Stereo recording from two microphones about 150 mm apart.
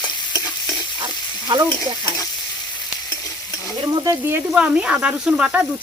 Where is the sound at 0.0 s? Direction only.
25° left (ahead or behind).